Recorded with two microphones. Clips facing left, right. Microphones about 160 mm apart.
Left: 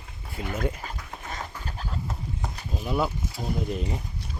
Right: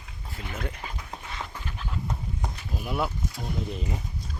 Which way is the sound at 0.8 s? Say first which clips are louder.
Left 1 dB; 45° left (ahead or behind).